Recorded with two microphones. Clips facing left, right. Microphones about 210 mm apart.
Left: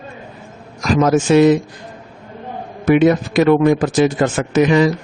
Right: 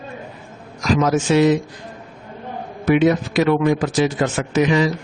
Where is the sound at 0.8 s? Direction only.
50° left (ahead or behind).